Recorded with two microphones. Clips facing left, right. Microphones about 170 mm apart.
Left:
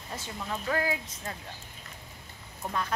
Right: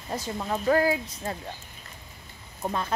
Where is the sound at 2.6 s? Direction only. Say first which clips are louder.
Right 3 dB; 30° right (ahead or behind).